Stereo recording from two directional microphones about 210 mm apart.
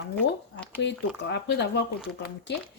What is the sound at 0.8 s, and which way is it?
Speech, 55° left (ahead or behind).